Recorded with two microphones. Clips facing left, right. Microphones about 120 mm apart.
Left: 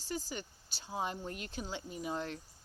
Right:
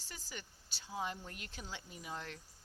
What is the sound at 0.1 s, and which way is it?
Speech, 30° left (ahead or behind).